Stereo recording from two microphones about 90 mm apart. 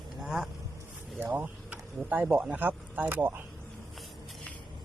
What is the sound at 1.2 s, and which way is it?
Speech, 20° right (ahead or behind).